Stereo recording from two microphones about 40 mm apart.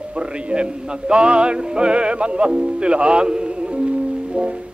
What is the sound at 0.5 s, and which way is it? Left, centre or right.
Music, right.